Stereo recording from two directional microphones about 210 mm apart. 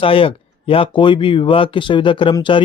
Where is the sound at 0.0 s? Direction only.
25° left (ahead or behind).